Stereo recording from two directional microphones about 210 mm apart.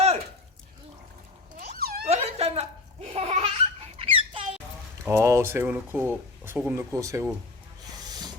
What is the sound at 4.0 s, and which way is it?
Squeak, 25° right (ahead or behind).